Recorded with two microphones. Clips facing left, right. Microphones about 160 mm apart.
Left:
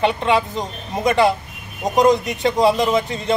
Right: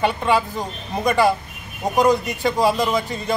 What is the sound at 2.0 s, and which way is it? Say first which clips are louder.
Speech: left 2 dB; 20° left (ahead or behind).